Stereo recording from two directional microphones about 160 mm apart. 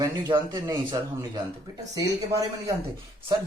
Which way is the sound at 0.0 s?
25° right (ahead or behind).